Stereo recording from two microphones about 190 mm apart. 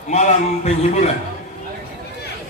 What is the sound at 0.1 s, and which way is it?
A man's voice, 35° left (ahead or behind).